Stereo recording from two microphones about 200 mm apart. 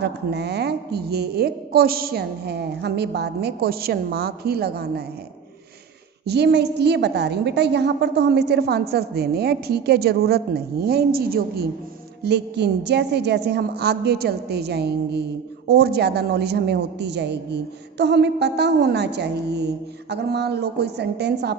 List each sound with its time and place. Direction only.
0.0 s a woman's voice: 55° right (ahead or behind)
6.2 s a woman's voice: 55° right (ahead or behind)